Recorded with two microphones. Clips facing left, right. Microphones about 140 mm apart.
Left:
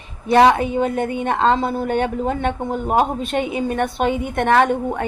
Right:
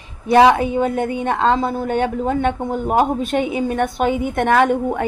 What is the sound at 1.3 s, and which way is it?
Speech, 30° left (ahead or behind).